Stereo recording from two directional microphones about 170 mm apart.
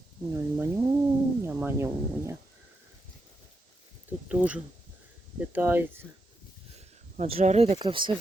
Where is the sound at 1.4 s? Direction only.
15° right (ahead or behind).